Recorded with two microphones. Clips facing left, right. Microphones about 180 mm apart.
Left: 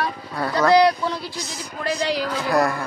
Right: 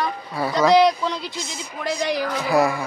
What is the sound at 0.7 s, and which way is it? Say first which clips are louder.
Speech: left 1 dB; 20° right (ahead or behind).